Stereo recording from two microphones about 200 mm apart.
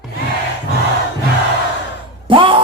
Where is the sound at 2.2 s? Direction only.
25° right (ahead or behind).